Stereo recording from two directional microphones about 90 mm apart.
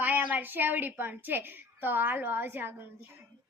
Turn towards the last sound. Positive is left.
turn(degrees=-25)  # may be behind; listen again after turning